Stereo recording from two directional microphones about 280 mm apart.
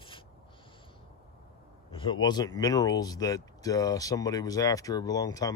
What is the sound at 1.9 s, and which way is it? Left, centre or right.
Speech, centre.